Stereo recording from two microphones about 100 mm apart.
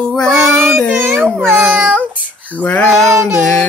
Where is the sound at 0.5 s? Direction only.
25° right (ahead or behind).